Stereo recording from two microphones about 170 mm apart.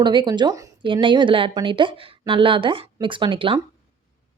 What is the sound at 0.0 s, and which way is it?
Speech, 25° right (ahead or behind).